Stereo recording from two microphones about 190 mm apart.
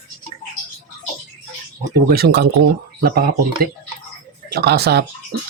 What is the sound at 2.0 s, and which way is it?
Speech, 55° right (ahead or behind).